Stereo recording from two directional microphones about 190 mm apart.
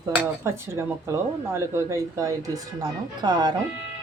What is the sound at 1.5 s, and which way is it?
Speech, 15° right (ahead or behind).